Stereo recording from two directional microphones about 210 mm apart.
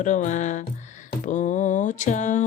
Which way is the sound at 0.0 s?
35° left (ahead or behind).